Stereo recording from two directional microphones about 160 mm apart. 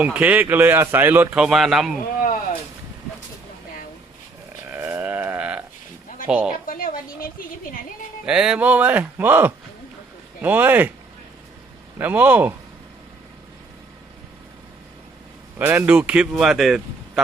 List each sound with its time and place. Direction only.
0.0 s a man's voice: 10° right (ahead or behind)
2.2 s a sound: 55° left (ahead or behind)
4.7 s livestock: 15° right (ahead or behind)
6.2 s speech: 5° right (ahead or behind)
6.7 s a woman's voice: 60° left (ahead or behind)
8.3 s a man's voice: 5° right (ahead or behind)
11.9 s a man's voice: 10° right (ahead or behind)
15.5 s a man's voice: 10° right (ahead or behind)